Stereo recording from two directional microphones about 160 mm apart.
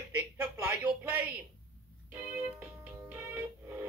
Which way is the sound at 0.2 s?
10° right (ahead or behind).